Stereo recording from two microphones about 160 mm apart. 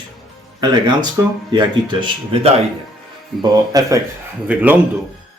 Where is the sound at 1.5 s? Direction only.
30° right (ahead or behind).